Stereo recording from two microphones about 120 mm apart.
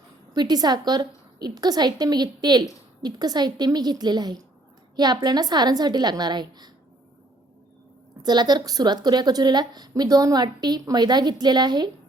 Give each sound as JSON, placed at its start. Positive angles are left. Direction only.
{"t": 0.3, "sound": "a woman's voice", "side_deg": -35}
{"t": 8.2, "sound": "a woman's voice", "side_deg": -35}